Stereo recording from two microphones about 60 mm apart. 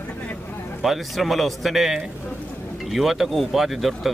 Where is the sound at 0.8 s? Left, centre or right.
Centre.